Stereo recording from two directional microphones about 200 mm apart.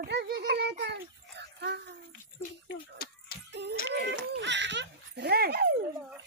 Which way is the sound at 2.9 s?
50° left (ahead or behind).